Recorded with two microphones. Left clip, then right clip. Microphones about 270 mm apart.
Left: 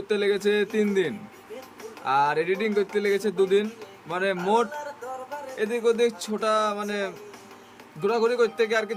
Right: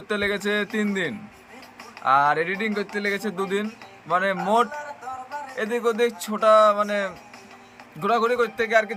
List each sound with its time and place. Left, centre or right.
0.1 s speech: centre